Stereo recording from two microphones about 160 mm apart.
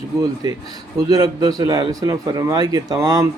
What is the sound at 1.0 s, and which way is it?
Speech, 25° right (ahead or behind).